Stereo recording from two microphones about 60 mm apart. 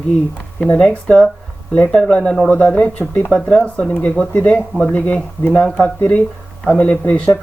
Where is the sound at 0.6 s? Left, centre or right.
Centre.